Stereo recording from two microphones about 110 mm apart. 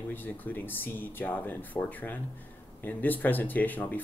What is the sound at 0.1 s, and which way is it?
Speech, 15° left (ahead or behind).